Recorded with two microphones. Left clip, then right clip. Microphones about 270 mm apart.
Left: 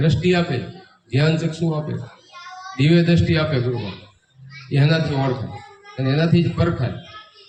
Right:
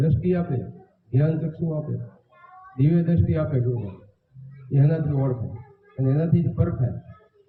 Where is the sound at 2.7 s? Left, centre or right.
Left.